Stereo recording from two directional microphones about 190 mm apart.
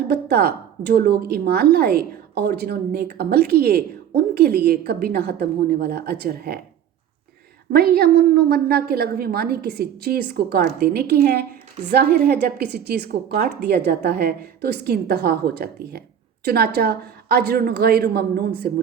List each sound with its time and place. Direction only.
0.1 s a woman's voice: 55° right (ahead or behind)
7.7 s a woman's voice: 55° right (ahead or behind)